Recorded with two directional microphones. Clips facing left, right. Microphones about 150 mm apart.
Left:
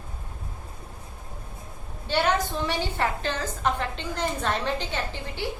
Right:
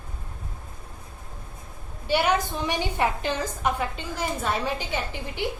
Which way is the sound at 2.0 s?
10° right (ahead or behind).